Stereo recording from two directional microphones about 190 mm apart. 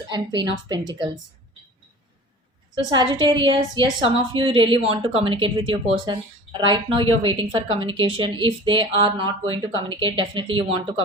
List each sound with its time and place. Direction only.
0.1 s a woman's voice: 20° right (ahead or behind)
2.7 s a woman's voice: 25° right (ahead or behind)